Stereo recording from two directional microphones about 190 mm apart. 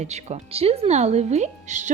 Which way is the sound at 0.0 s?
35° right (ahead or behind).